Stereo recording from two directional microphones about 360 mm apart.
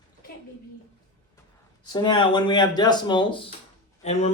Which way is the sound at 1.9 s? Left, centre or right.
Centre.